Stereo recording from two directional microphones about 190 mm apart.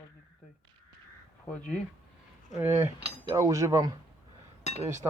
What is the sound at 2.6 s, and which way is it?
Speech, 10° right (ahead or behind).